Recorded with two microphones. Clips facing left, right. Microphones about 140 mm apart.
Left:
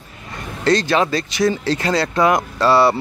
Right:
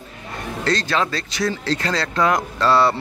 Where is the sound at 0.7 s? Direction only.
15° left (ahead or behind).